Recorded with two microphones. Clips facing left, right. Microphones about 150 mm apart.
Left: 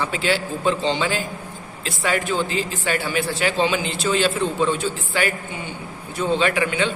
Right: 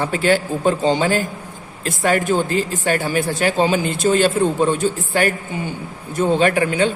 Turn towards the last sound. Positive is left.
turn(degrees=-45)  # may be behind; listen again after turning